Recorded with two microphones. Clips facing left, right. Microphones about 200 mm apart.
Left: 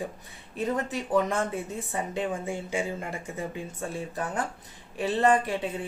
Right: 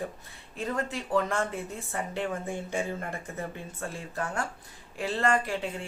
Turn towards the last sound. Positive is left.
turn(degrees=20)  # may be behind; listen again after turning